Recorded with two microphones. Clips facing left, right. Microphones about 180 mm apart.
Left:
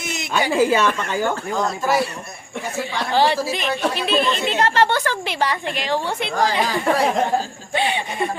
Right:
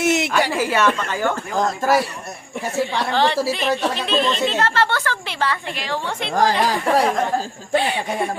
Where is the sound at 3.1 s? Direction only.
10° left (ahead or behind).